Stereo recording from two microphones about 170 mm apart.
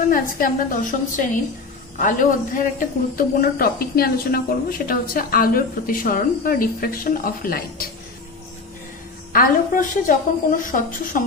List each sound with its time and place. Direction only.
0.1 s a woman's voice: 50° left (ahead or behind)
9.3 s a woman's voice: 55° left (ahead or behind)